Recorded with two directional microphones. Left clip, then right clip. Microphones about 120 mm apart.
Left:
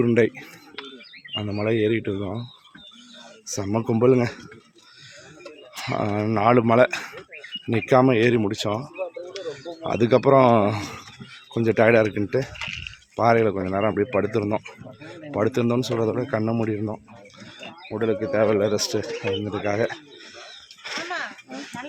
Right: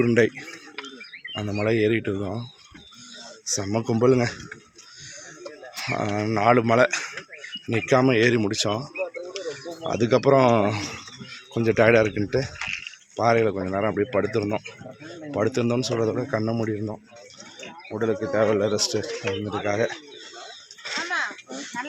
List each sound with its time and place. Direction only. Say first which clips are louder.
0.0 s speech: even; 25° left (ahead or behind)
1.3 s speech: even; 15° left (ahead or behind)
3.4 s speech: even; 30° left (ahead or behind)
5.7 s speech: left 1 dB; 45° left (ahead or behind); by 8.9 s 15° left (ahead or behind)
9.4 s a sound: left 2 dB; 20° left (ahead or behind)
9.8 s a man's voice: left 2 dB; 35° left (ahead or behind)
13.1 s a man's voice: left 2 dB; 45° left (ahead or behind)
20.8 s a sound: right 3 dB; 45° left (ahead or behind)